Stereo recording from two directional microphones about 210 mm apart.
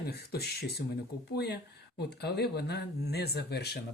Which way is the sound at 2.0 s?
50° left (ahead or behind).